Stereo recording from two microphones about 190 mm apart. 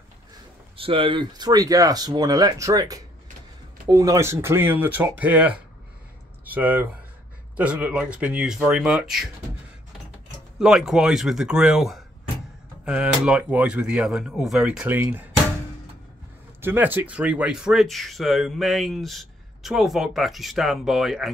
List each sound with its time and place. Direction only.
0.7 s speech: 30° right (ahead or behind); by 9.3 s centre (ahead or behind)
10.6 s speech: centre (ahead or behind)
16.6 s speech: 10° right (ahead or behind)